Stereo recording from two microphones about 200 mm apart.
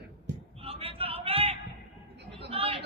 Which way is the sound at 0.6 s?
30° right (ahead or behind).